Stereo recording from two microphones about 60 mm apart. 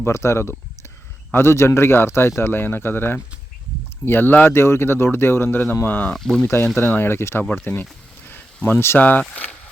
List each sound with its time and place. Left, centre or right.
0.0 s speech: left
6.1 s speech: centre
6.4 s speech: left
9.0 s speech: left